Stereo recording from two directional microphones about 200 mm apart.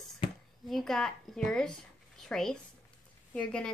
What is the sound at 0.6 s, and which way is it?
Speech, centre (ahead or behind).